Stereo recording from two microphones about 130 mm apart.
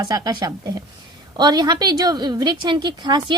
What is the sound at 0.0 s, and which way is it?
A woman's voice, 30° right (ahead or behind).